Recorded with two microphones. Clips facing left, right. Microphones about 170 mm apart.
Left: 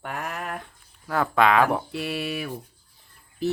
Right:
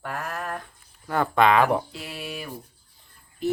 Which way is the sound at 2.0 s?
70° left (ahead or behind).